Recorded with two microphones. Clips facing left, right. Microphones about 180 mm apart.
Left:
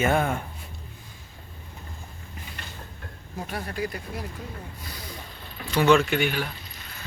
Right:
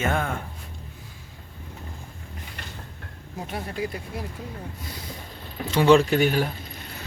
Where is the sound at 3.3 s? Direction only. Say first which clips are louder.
Right 1 dB; 20° right (ahead or behind); by 6.8 s 45° right (ahead or behind).